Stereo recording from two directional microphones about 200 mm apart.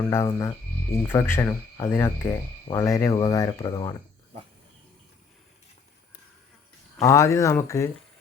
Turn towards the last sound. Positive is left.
turn(degrees=15)  # may be behind; listen again after turning